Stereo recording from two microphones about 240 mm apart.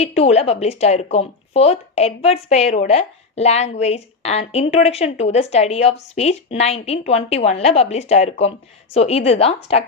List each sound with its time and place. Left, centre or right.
0.0 s speech: left